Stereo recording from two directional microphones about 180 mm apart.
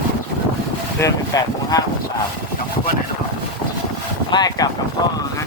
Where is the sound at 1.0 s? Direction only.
20° left (ahead or behind).